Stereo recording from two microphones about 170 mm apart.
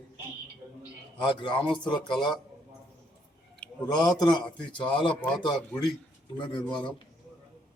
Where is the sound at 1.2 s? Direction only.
30° left (ahead or behind).